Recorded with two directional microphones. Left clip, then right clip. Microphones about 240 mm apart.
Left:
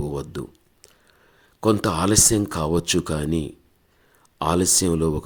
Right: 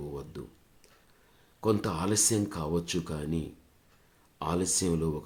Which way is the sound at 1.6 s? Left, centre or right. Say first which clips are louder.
Left 9 dB; left.